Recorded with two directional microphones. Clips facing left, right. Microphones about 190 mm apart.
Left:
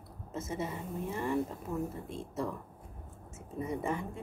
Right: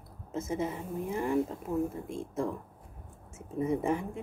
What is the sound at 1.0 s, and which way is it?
Speech, 15° right (ahead or behind).